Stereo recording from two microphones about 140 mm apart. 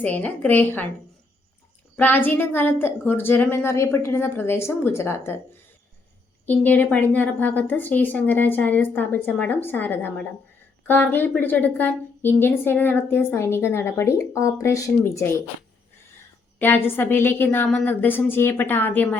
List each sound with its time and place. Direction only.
0.0 s a woman's voice: 10° left (ahead or behind)
2.0 s a woman's voice: 15° left (ahead or behind)
6.4 s a woman's voice: 15° left (ahead or behind)
16.6 s a woman's voice: 15° left (ahead or behind)